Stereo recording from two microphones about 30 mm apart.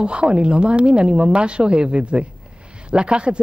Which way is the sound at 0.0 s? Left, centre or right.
Right.